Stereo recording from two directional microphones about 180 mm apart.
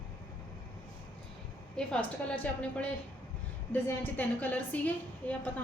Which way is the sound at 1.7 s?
5° left (ahead or behind).